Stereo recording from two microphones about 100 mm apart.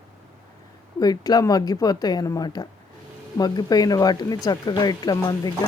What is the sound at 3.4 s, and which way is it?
Speech, 40° left (ahead or behind).